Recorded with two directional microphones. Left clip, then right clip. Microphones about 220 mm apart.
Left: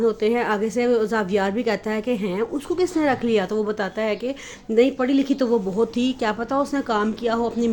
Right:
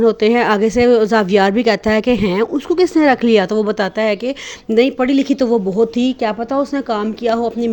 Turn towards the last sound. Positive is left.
turn(degrees=-25)  # may be behind; listen again after turning